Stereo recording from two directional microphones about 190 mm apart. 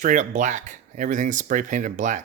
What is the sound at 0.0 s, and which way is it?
Speech, 40° right (ahead or behind).